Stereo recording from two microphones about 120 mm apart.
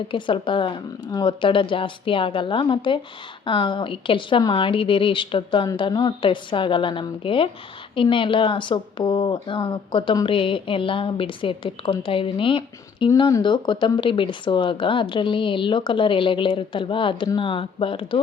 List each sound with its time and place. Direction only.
0.1 s a woman's voice: 45° left (ahead or behind)